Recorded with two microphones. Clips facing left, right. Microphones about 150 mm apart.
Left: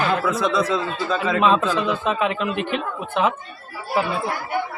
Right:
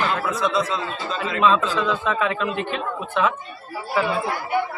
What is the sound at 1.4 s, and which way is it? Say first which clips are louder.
Speech: right 1 dB; 15° left (ahead or behind).